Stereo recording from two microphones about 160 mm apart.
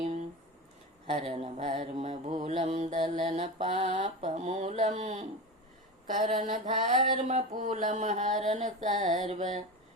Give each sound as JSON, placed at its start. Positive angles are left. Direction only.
{"t": 1.2, "sound": "mantra", "side_deg": -35}
{"t": 3.9, "sound": "speech", "side_deg": -45}
{"t": 6.4, "sound": "mantra", "side_deg": -55}
{"t": 7.0, "sound": "speech", "side_deg": -45}